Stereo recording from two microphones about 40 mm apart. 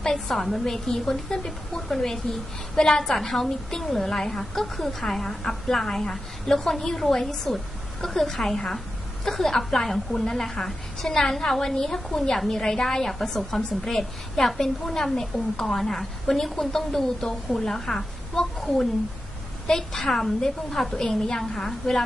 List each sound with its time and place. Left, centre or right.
0.0 s a woman's voice: centre
20.9 s a woman's voice: centre
21.4 s a woman's voice: centre